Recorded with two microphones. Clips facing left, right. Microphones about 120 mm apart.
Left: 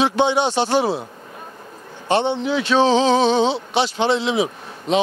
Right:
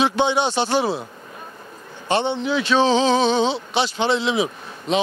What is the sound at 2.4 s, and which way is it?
Speech, 50° left (ahead or behind).